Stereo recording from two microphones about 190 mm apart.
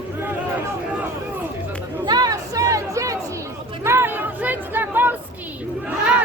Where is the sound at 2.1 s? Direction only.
20° right (ahead or behind).